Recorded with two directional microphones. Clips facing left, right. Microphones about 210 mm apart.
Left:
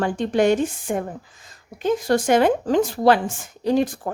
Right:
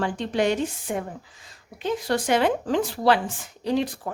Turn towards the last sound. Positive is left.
turn(degrees=45)  # may be behind; listen again after turning